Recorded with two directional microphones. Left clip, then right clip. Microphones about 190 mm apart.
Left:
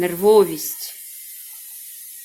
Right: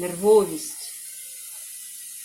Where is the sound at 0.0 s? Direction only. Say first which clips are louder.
Left 4 dB; 30° left (ahead or behind).